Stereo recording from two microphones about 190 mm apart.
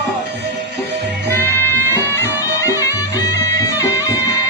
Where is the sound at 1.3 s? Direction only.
10° left (ahead or behind).